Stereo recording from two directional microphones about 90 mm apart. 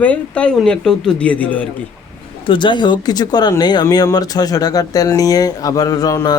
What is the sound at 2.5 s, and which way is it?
Speech, 60° left (ahead or behind).